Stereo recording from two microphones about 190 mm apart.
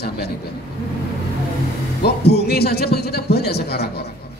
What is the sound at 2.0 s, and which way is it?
A man's voice, 60° left (ahead or behind).